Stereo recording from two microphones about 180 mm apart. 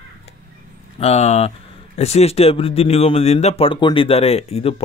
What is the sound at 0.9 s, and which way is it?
Speech, 35° left (ahead or behind).